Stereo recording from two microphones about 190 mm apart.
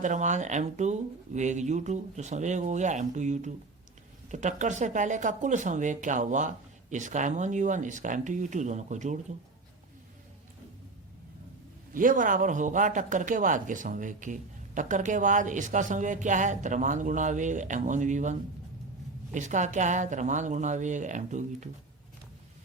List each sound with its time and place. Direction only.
0.0 s speech: 40° right (ahead or behind)
11.9 s speech: 45° right (ahead or behind)